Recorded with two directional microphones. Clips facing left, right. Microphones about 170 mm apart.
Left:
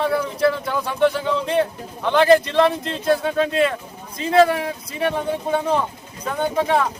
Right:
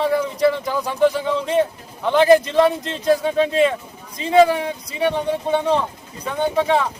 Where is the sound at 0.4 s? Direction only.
15° right (ahead or behind).